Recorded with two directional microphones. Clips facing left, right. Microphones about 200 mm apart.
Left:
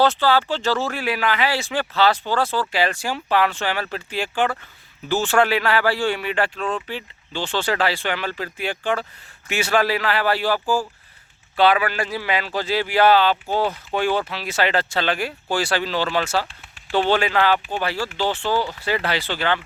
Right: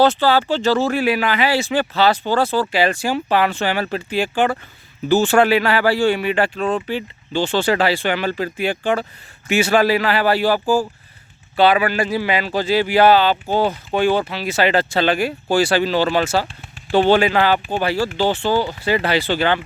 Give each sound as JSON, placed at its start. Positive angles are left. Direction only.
{"t": 0.0, "sound": "speech", "side_deg": 0}
{"t": 13.3, "sound": "speech", "side_deg": -30}
{"t": 14.0, "sound": "speech", "side_deg": 0}
{"t": 18.5, "sound": "speech", "side_deg": -25}
{"t": 18.9, "sound": "speech", "side_deg": -5}